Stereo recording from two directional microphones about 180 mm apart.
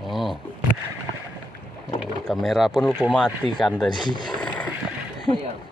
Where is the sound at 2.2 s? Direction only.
Centre (ahead or behind).